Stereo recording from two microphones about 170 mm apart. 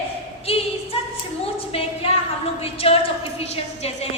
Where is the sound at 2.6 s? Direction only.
35° left (ahead or behind).